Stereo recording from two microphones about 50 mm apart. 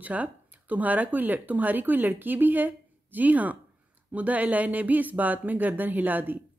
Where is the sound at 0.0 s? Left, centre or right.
Right.